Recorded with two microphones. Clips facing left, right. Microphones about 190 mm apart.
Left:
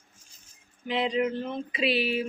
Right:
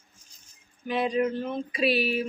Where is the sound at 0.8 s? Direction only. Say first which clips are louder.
Right 1 dB; 20° left (ahead or behind).